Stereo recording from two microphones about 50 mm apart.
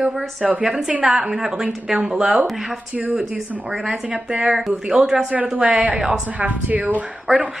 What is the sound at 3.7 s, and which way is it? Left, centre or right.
Speech, centre.